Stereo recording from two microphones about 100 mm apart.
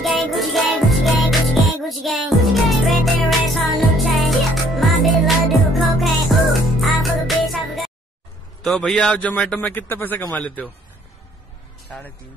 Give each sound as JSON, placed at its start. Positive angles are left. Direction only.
{"t": 0.0, "sound": "music", "side_deg": 0}
{"t": 8.6, "sound": "a man's voice", "side_deg": 5}